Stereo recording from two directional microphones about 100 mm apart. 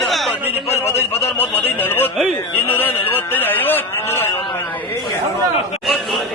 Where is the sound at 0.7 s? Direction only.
20° left (ahead or behind).